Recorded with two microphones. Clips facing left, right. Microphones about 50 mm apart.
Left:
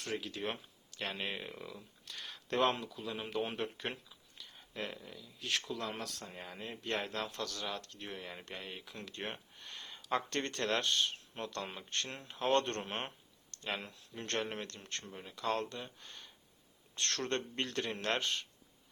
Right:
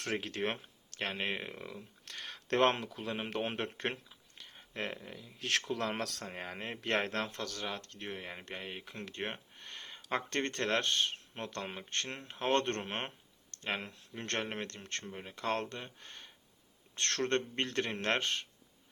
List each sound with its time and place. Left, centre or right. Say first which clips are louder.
0.0 s speech: right 3 dB; right
0.4 s speech: right 4 dB; right
1.5 s speech: right 2 dB; right
2.2 s speech: right 3 dB; right
4.1 s a sound: right 1 dB; right
5.2 s speech: right 3 dB; right
5.7 s speech: right 5 dB; right
6.2 s speech: right 4 dB; right
7.3 s speech: right 1 dB; right
14.7 s speech: right 3 dB; right
15.0 s speech: right 3 dB; right
15.3 s speech: even; right